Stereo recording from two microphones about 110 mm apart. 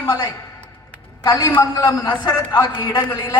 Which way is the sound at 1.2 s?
30° left (ahead or behind).